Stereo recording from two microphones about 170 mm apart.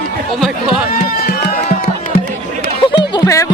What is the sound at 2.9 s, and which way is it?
Music, 25° left (ahead or behind).